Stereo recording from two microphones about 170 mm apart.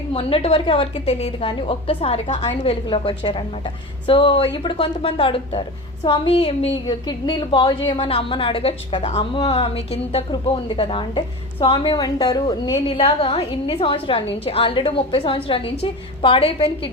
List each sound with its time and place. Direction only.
0.1 s a woman's voice: 35° left (ahead or behind)